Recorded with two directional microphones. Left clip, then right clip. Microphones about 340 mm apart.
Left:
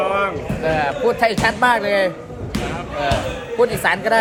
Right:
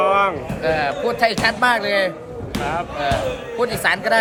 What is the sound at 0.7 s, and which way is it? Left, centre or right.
A man's voice, centre.